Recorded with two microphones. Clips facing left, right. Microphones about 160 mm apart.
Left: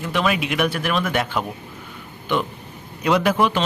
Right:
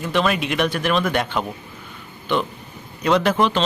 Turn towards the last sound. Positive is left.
turn(degrees=10)  # may be behind; listen again after turning